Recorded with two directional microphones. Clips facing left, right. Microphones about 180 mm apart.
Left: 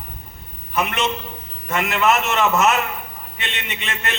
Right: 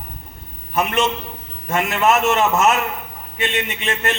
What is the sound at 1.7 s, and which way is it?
A man's voice, 45° right (ahead or behind).